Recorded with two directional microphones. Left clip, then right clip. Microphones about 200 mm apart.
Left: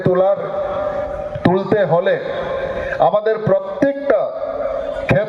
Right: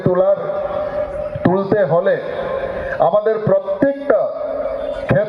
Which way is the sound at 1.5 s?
50° right (ahead or behind).